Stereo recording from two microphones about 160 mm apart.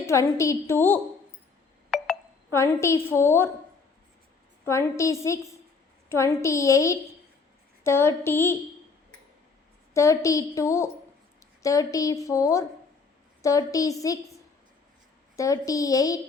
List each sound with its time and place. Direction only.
0.0 s a woman's voice: 20° left (ahead or behind)
1.9 s telephone dialing: 5° left (ahead or behind)
2.5 s a woman's voice: 15° left (ahead or behind)
4.6 s a woman's voice: 15° left (ahead or behind)
9.9 s a woman's voice: 20° left (ahead or behind)
15.4 s a woman's voice: 20° left (ahead or behind)